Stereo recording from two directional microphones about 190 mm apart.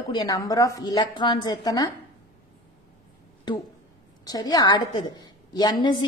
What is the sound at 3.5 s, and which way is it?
A woman's voice, 25° left (ahead or behind).